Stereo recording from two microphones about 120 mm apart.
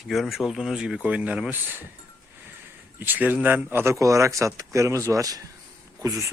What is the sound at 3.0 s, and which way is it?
Speech, 15° right (ahead or behind).